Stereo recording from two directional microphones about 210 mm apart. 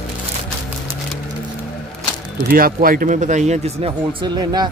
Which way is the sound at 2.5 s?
45° right (ahead or behind).